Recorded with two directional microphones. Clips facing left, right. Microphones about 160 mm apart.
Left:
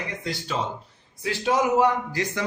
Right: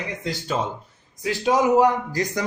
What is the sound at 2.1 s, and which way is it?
Speech, 40° right (ahead or behind).